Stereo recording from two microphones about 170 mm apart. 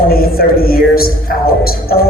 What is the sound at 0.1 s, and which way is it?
A man's voice, 60° left (ahead or behind).